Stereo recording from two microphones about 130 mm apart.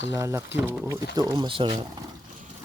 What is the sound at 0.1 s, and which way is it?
Speech, 25° right (ahead or behind).